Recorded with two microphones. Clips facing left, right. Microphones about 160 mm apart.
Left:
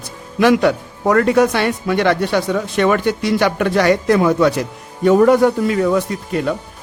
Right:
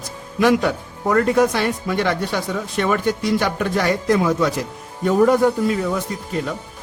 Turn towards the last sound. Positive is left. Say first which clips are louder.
# left 5 dB
turn(degrees=70)  # may be behind; listen again after turning